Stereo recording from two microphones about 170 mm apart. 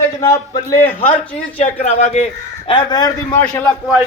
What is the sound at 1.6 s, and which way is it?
A man's voice, 40° left (ahead or behind).